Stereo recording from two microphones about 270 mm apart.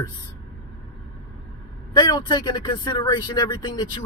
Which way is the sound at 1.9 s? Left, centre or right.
Centre.